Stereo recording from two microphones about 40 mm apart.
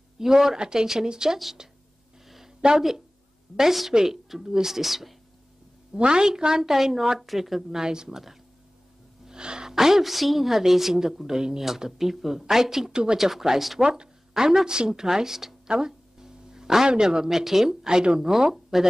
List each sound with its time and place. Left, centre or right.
0.2 s a woman's voice: centre
2.2 s a sound: centre
3.5 s a woman's voice: centre
5.9 s a woman's voice: right; by 7.8 s centre
7.8 s a woman's voice: centre
9.2 s gasp: centre
9.8 s a woman's voice: centre
12.9 s speech: right
13.2 s speech: centre
13.7 s speech: right
14.3 s a woman's voice: centre
15.7 s a sound: centre
16.9 s a woman's voice: centre
18.5 s speech: centre